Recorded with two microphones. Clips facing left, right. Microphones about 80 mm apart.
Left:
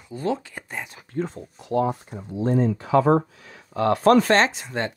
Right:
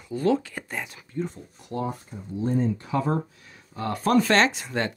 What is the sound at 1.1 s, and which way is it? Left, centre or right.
Speech, left.